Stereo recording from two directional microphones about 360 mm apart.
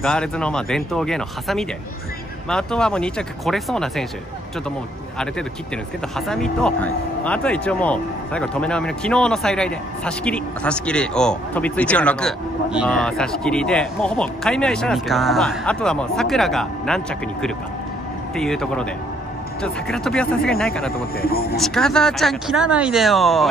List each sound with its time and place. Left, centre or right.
0.0 s speech: centre
6.1 s speech: centre